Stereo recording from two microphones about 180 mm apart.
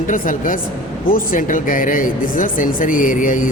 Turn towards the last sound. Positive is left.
turn(degrees=45)  # may be behind; listen again after turning